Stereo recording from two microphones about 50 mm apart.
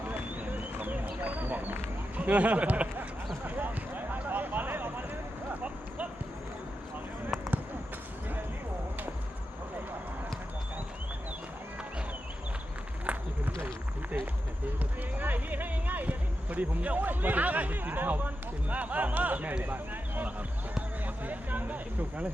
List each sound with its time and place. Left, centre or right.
0.1 s a sound: right
13.1 s run: right
15.2 s speech: right